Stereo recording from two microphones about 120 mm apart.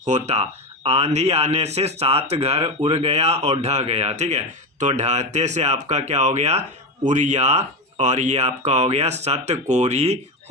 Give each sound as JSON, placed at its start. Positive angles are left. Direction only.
{"t": 0.0, "sound": "speech", "side_deg": -70}